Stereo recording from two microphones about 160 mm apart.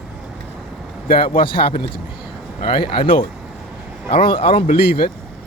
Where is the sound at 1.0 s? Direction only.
65° left (ahead or behind).